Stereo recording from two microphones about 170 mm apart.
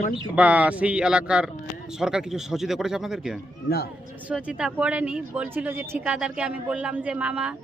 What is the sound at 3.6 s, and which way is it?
Speech, 65° left (ahead or behind).